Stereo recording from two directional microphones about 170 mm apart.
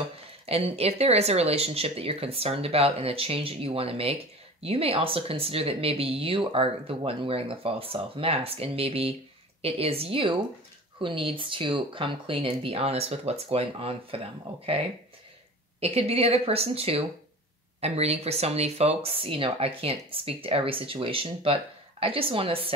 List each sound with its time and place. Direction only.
0.5 s speech: 35° right (ahead or behind)
15.8 s speech: 35° right (ahead or behind)